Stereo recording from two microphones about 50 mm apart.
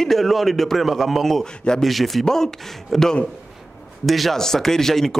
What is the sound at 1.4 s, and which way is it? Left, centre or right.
Speech, centre.